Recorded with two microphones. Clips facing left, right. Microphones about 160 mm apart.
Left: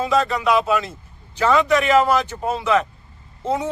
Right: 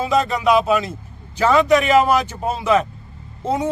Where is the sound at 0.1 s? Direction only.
15° right (ahead or behind).